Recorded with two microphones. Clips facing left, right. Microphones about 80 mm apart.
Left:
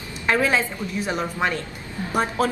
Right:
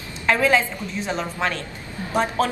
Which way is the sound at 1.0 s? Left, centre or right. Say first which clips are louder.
Left 1 dB; centre.